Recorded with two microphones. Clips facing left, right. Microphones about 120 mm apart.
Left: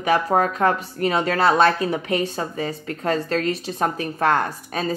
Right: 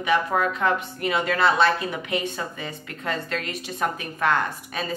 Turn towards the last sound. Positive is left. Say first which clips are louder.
# left 4 dB
turn(degrees=35)  # may be behind; listen again after turning